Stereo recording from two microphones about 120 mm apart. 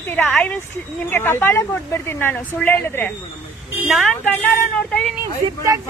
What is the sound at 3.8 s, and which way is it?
A woman's voice, 5° right (ahead or behind).